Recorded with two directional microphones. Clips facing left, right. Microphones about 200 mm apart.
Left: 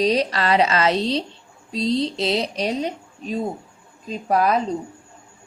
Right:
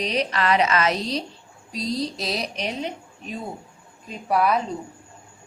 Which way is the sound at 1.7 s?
25° left (ahead or behind).